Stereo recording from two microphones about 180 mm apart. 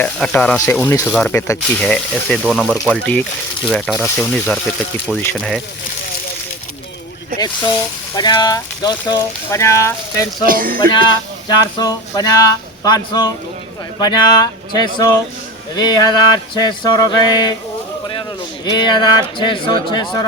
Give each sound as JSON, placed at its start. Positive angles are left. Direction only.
{"t": 0.0, "sound": "speech", "side_deg": 5}
{"t": 7.3, "sound": "speech", "side_deg": 25}
{"t": 10.4, "sound": "speech", "side_deg": -50}
{"t": 10.8, "sound": "speech", "side_deg": 25}